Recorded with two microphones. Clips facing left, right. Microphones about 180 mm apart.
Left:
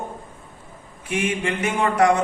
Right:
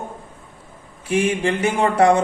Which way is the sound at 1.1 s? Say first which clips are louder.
Right 5 dB; 35° right (ahead or behind).